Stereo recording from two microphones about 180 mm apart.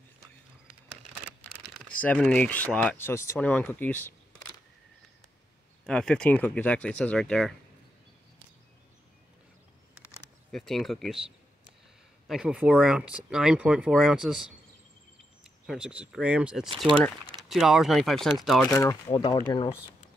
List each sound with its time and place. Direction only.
1.8 s speech: 5° left (ahead or behind)
5.9 s speech: 5° left (ahead or behind)
10.5 s speech: centre (ahead or behind)
15.6 s speech: 5° right (ahead or behind)
16.6 s speech: 30° right (ahead or behind)
17.5 s speech: centre (ahead or behind)
18.7 s speech: 20° left (ahead or behind)